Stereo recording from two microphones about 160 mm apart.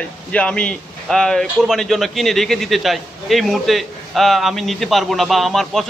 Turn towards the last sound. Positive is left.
turn(degrees=0)  # may be behind; listen again after turning